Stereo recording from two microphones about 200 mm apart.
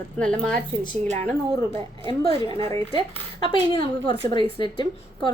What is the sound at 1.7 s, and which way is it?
Speech, 30° right (ahead or behind).